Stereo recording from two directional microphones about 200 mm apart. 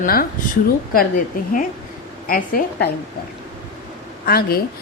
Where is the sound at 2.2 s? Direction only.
45° left (ahead or behind).